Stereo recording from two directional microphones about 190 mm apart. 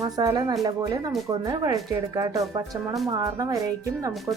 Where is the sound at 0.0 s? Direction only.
20° right (ahead or behind).